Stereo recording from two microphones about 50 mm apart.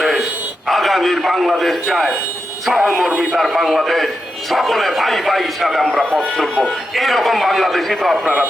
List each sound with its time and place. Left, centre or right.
0.7 s a man's voice: centre
6.3 s a man's voice: centre
8.2 s speech: right